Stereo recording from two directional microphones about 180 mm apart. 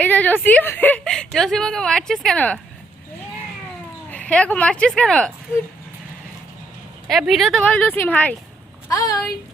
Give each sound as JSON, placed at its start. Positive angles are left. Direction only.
{"t": 0.0, "sound": "a woman's voice", "side_deg": 10}
{"t": 4.1, "sound": "speech", "side_deg": 5}
{"t": 7.1, "sound": "speech", "side_deg": 0}
{"t": 8.9, "sound": "speech", "side_deg": 20}